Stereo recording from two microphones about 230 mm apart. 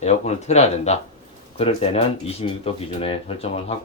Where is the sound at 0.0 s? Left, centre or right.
Left.